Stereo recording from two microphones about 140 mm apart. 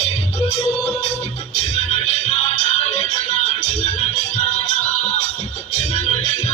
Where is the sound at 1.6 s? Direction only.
50° left (ahead or behind).